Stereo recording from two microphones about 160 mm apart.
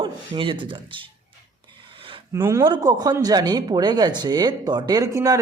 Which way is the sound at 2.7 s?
25° right (ahead or behind).